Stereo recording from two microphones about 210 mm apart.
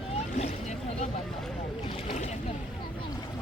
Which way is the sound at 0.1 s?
30° left (ahead or behind).